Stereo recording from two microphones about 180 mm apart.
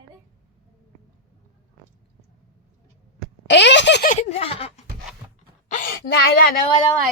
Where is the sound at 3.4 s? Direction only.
75° left (ahead or behind).